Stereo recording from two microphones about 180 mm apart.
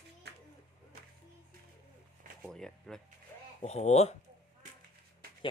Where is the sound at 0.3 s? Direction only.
65° right (ahead or behind).